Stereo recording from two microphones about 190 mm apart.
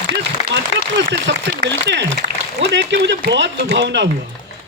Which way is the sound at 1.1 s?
65° right (ahead or behind).